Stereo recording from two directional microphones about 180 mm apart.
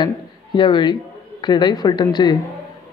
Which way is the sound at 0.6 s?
25° left (ahead or behind).